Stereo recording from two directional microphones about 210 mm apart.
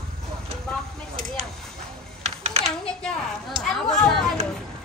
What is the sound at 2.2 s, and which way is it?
Typing, 30° right (ahead or behind).